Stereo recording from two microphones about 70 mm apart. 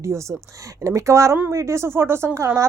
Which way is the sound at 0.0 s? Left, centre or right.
Right.